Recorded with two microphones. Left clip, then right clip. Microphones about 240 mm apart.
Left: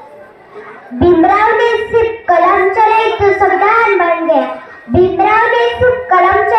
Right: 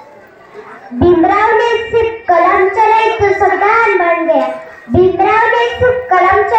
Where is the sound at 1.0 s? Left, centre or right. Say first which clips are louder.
Left 1 dB; left.